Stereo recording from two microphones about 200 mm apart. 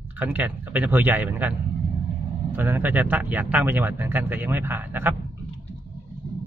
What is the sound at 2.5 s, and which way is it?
Speech, 10° right (ahead or behind).